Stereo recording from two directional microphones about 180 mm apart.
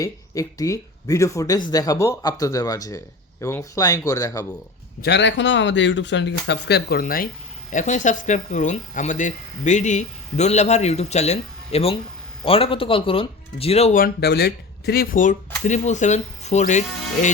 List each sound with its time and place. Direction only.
0.0 s speech: 20° left (ahead or behind)
5.0 s speech: 70° left (ahead or behind)
7.0 s speech: 50° left (ahead or behind); by 13.9 s 35° left (ahead or behind)
13.9 s speech: 60° left (ahead or behind); by 16.8 s 40° left (ahead or behind)